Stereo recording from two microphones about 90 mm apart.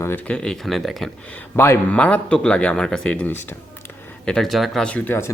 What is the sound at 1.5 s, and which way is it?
Speech, 30° left (ahead or behind).